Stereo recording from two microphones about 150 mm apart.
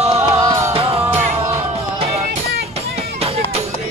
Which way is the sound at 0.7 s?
40° right (ahead or behind).